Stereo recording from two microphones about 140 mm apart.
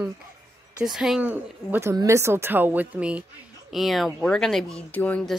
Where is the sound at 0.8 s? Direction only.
5° right (ahead or behind).